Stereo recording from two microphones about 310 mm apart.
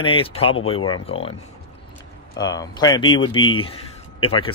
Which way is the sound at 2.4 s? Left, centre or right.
Centre.